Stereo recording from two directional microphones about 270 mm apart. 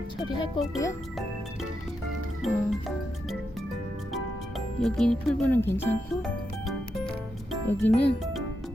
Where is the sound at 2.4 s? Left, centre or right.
Centre.